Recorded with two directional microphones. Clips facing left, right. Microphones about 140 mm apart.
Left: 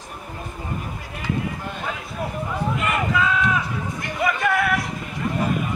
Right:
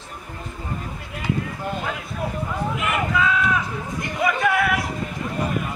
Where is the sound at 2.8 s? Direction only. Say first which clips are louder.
Right 1 dB; centre (ahead or behind).